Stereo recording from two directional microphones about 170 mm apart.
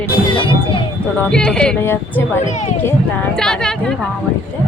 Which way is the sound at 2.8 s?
5° left (ahead or behind).